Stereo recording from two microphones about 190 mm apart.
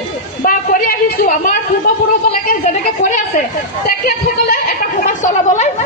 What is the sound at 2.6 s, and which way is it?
Chatter, 40° left (ahead or behind).